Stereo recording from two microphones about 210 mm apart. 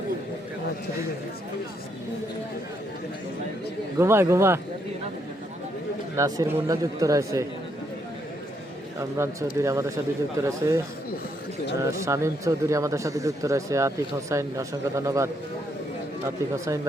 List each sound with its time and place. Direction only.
3.9 s speech: 10° right (ahead or behind)
6.1 s speech: 15° right (ahead or behind)
9.0 s speech: 15° right (ahead or behind)
11.9 s speech: 15° right (ahead or behind)